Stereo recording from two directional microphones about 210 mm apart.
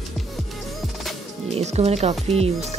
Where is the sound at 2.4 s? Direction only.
30° right (ahead or behind).